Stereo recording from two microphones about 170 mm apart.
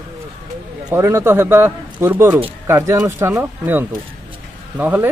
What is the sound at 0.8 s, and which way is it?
Speech, 15° right (ahead or behind).